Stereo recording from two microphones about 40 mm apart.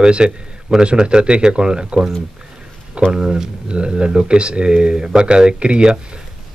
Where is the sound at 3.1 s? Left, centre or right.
Right.